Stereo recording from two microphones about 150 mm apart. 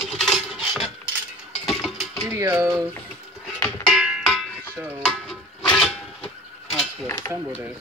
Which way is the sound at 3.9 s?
5° right (ahead or behind).